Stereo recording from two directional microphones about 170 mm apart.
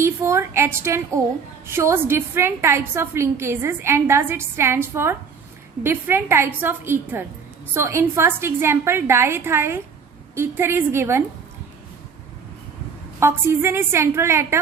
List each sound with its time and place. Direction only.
0.0 s a woman's voice: 15° right (ahead or behind)
13.1 s a woman's voice: 15° right (ahead or behind)